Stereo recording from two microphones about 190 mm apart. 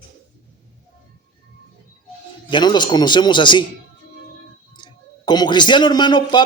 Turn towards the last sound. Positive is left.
turn(degrees=25)  # may be behind; listen again after turning